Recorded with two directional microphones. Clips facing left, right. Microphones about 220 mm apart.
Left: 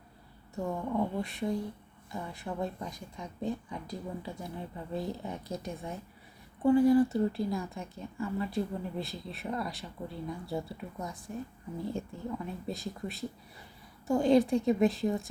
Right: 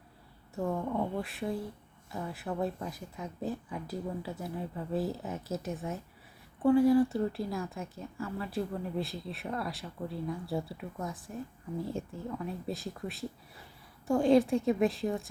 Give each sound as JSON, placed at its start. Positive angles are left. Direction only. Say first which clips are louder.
{"t": 0.5, "sound": "speech", "louder": "even", "side_deg": 0}